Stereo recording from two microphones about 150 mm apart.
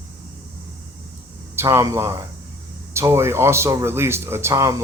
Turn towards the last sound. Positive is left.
turn(degrees=-20)  # may be behind; listen again after turning